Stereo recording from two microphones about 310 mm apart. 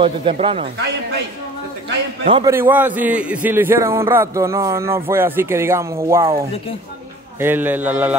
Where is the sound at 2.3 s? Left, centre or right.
Centre.